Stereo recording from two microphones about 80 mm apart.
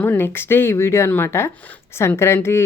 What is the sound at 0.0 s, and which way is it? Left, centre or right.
Speech, left.